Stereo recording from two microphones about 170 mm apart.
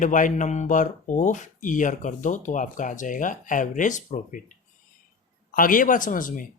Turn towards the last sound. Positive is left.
turn(degrees=50)  # may be behind; listen again after turning